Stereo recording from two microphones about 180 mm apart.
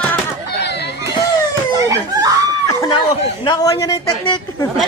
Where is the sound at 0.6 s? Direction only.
70° left (ahead or behind).